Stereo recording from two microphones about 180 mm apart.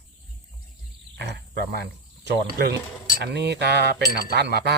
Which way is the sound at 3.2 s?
70° right (ahead or behind).